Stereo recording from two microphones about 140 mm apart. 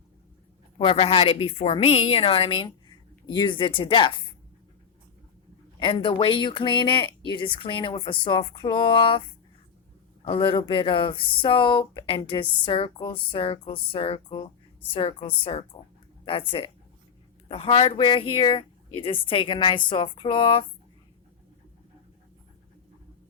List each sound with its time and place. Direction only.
0.8 s speech: 40° left (ahead or behind)
5.8 s speech: 35° left (ahead or behind)
10.2 s speech: 40° left (ahead or behind)